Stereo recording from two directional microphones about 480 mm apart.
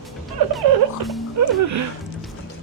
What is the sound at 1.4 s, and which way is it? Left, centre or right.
Speech, right.